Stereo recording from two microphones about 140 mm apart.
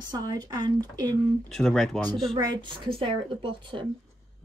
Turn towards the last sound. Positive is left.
turn(degrees=-40)  # may be behind; listen again after turning